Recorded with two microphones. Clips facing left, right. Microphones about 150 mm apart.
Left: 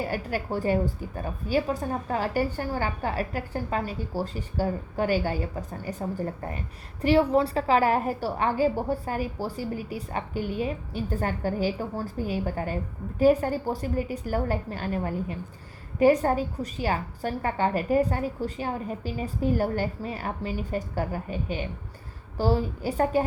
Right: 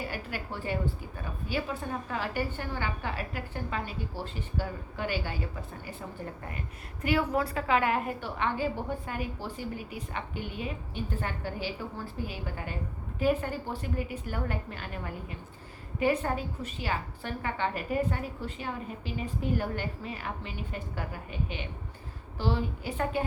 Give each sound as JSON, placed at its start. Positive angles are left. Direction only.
{"t": 0.0, "sound": "a woman's voice", "side_deg": 40}